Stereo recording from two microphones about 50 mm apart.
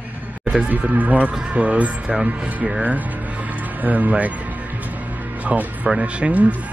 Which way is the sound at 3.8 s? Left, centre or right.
Right.